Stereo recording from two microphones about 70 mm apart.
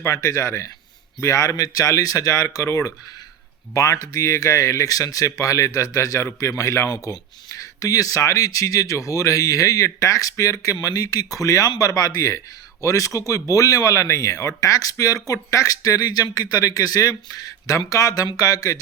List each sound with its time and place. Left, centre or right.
0.1 s speech: left